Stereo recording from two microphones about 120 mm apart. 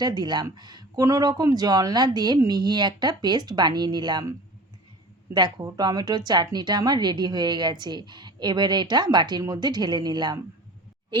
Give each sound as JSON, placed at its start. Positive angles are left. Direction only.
{"t": 0.0, "sound": "speech", "side_deg": -35}